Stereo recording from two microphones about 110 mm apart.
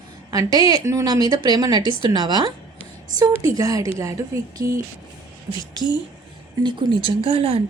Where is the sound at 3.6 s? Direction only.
30° right (ahead or behind).